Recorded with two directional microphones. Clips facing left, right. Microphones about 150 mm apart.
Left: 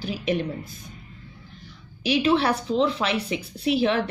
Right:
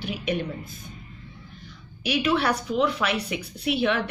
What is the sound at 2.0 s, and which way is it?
A woman's voice, 30° left (ahead or behind).